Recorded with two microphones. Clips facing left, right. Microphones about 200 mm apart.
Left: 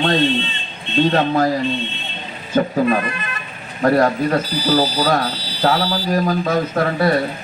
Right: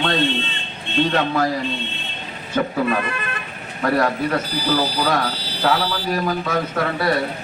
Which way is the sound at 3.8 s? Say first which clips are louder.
Left 4 dB; 35° left (ahead or behind).